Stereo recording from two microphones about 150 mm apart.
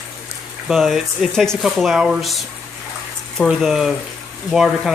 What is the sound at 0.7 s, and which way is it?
Speech, centre (ahead or behind).